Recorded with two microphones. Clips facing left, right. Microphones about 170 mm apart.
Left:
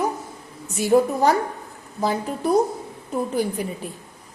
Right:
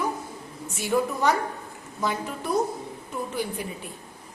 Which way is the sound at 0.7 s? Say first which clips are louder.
Left 7 dB; 35° left (ahead or behind).